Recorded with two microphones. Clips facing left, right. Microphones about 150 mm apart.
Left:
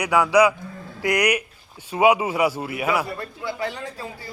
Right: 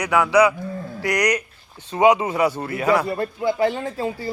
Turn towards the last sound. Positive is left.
turn(degrees=-25)  # may be behind; listen again after turning